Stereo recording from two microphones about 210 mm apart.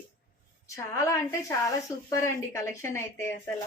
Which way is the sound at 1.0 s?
15° left (ahead or behind).